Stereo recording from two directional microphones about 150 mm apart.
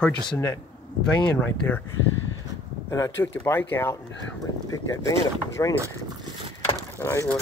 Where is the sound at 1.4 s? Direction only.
10° left (ahead or behind).